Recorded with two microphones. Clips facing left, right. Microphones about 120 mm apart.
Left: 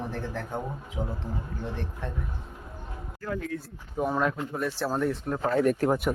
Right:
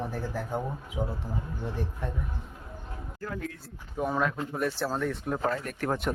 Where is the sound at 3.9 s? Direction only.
5° left (ahead or behind).